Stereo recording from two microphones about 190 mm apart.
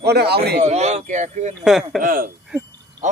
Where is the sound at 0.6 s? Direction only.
35° right (ahead or behind).